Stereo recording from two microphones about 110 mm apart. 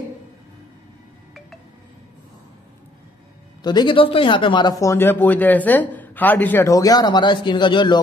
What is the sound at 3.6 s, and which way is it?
Speech, 45° left (ahead or behind).